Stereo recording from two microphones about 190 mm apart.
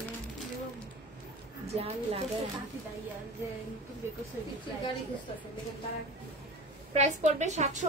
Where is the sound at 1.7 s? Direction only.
30° right (ahead or behind).